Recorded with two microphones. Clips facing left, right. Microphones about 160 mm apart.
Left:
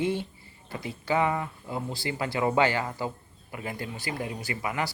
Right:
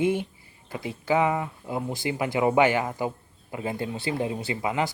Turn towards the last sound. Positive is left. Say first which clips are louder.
# right 4 dB
turn(degrees=-20)  # may be behind; listen again after turning